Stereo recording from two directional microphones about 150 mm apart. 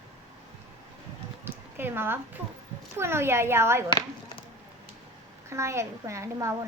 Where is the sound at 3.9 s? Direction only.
30° left (ahead or behind).